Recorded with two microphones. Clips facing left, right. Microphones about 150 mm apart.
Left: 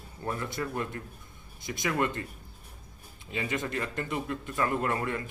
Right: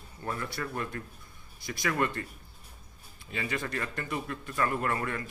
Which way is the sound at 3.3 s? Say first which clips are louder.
Left 2 dB; 20° left (ahead or behind).